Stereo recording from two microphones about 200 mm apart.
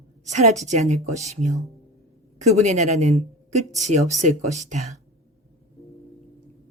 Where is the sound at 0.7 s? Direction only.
35° right (ahead or behind).